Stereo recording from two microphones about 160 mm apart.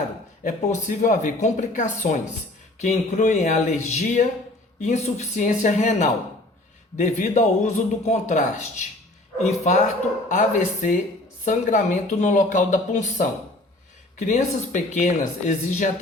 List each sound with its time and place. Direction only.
0.4 s speech: 50° left (ahead or behind)